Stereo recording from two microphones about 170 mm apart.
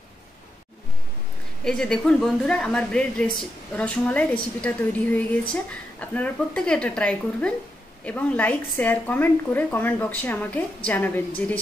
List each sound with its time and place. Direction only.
1.6 s a woman's voice: 5° left (ahead or behind)